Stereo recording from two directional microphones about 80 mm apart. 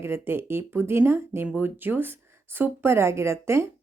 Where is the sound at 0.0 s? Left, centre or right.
Right.